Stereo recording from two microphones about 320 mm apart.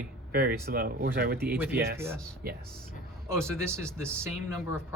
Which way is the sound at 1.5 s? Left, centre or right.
Centre.